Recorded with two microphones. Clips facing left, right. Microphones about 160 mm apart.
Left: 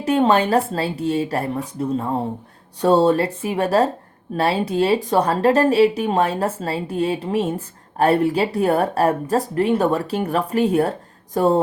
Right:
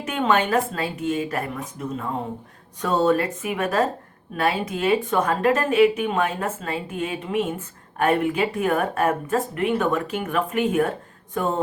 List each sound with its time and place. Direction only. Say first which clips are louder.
0.0 s speech: left 5 dB; 35° left (ahead or behind)